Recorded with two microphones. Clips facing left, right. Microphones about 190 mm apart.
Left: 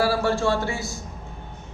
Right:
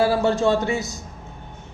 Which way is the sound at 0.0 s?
20° right (ahead or behind).